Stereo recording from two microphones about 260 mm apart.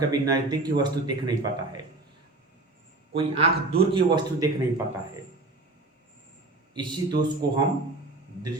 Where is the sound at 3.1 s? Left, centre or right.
Right.